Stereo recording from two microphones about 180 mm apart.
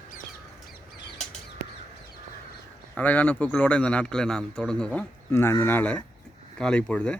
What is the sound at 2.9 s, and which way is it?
A man's voice, 10° left (ahead or behind).